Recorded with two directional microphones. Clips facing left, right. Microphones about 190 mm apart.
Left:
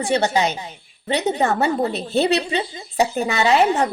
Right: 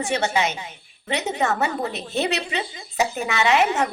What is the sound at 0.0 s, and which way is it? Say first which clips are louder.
A woman's voice: left 4 dB; 35° left (ahead or behind).